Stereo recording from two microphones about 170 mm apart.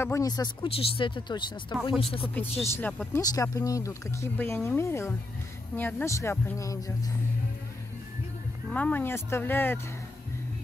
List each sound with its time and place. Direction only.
0.0 s speech: 20° left (ahead or behind)
2.6 s speech: 10° left (ahead or behind)
3.2 s speech: 20° left (ahead or behind)
8.7 s speech: 10° left (ahead or behind)